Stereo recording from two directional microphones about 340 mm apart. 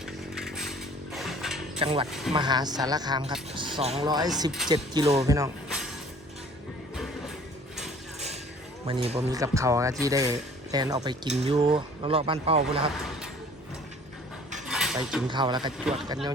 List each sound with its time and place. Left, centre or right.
0.0 s chainsaw: centre
1.8 s speech: centre
2.0 s speech: centre
2.3 s speech: centre
8.9 s speech: centre
14.7 s dishes: centre
15.3 s speech: centre
15.8 s speech: centre